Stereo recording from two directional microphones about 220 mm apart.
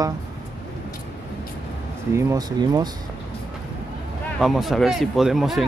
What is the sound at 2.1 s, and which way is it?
Speech, 15° right (ahead or behind).